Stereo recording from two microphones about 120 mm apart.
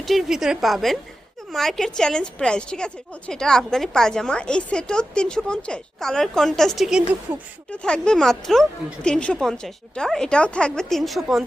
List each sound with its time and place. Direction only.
0.0 s a woman's voice: centre (ahead or behind)
7.7 s a woman's voice: 10° left (ahead or behind)